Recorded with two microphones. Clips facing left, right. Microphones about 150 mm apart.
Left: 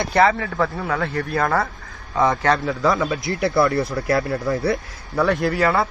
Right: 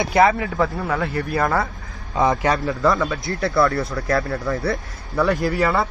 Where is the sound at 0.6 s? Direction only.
Centre (ahead or behind).